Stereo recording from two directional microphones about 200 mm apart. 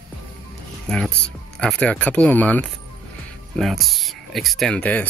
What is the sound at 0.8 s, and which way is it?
Speech, 5° left (ahead or behind).